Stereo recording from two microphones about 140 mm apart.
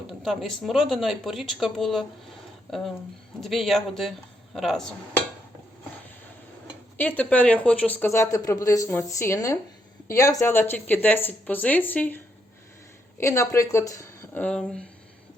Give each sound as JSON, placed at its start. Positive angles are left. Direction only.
{"t": 0.1, "sound": "speech", "side_deg": 0}
{"t": 6.9, "sound": "speech", "side_deg": 10}
{"t": 14.4, "sound": "speech", "side_deg": 5}